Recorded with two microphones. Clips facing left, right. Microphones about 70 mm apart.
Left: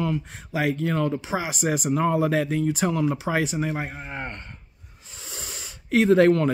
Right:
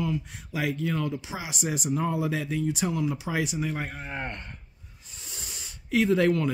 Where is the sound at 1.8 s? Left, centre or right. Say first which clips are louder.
Left 5 dB; left.